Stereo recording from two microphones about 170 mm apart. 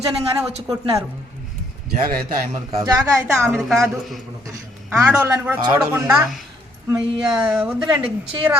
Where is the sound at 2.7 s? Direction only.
20° right (ahead or behind).